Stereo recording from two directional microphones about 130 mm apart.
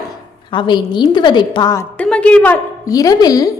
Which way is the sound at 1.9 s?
10° left (ahead or behind).